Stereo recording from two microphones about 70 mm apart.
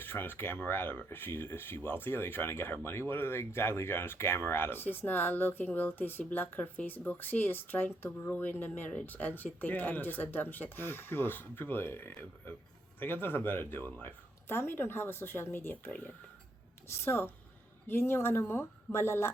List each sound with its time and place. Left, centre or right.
0.0 s speech: left
17.0 s speech: left